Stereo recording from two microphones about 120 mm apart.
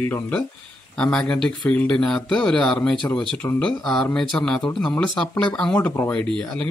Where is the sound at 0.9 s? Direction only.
10° left (ahead or behind).